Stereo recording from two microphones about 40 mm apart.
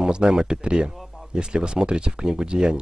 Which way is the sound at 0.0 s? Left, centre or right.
Centre.